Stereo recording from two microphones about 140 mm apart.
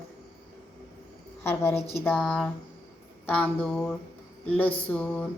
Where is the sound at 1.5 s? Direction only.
20° left (ahead or behind).